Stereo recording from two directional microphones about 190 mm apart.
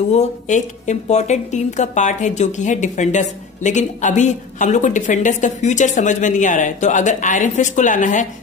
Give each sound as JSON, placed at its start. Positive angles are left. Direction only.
{"t": 0.1, "sound": "a woman's voice", "side_deg": 40}